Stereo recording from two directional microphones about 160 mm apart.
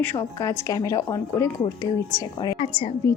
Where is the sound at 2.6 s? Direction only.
35° left (ahead or behind).